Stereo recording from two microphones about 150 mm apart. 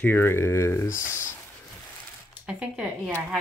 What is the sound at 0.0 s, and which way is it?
Speech, 15° left (ahead or behind).